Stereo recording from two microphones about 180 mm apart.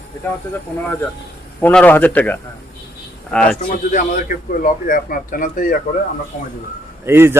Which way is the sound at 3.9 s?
45° left (ahead or behind).